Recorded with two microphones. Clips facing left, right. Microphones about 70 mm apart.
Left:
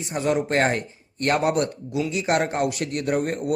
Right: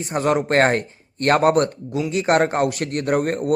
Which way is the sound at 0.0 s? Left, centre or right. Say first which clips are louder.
Right 3 dB; right.